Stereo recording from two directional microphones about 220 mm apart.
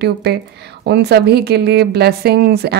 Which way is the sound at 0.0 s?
45° right (ahead or behind).